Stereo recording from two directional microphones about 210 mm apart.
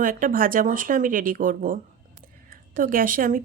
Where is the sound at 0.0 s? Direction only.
40° right (ahead or behind).